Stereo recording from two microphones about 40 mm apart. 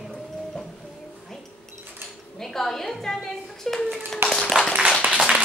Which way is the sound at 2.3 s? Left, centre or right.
Centre.